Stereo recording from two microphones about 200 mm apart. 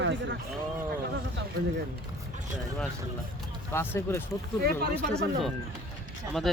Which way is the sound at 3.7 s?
15° left (ahead or behind).